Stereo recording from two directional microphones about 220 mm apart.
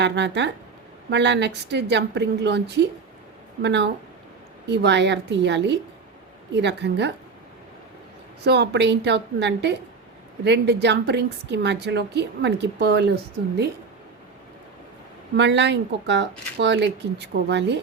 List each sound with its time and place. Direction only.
0.0 s a woman's voice: 50° right (ahead or behind)
8.4 s a woman's voice: 50° right (ahead or behind)
15.4 s a woman's voice: 55° right (ahead or behind)